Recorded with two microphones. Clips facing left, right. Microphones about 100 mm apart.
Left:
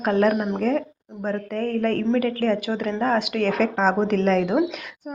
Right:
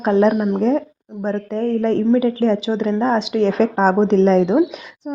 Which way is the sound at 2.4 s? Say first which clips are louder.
Right 5 dB; 25° right (ahead or behind).